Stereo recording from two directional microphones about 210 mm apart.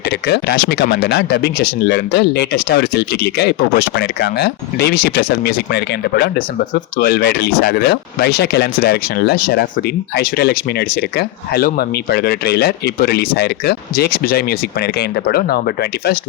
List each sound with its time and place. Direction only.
0.3 s speech: 50° left (ahead or behind)